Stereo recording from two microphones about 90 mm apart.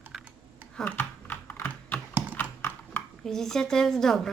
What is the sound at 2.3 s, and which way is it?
Clip-clop, 20° left (ahead or behind).